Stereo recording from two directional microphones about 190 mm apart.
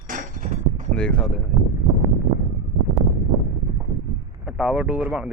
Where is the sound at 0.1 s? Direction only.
45° right (ahead or behind).